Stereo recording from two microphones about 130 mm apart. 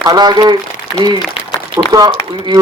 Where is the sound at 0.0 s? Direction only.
30° right (ahead or behind).